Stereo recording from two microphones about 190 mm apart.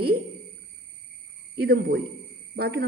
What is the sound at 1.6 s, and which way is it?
Speech, 55° right (ahead or behind).